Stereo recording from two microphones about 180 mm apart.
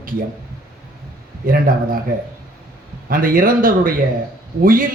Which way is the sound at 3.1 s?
50° right (ahead or behind).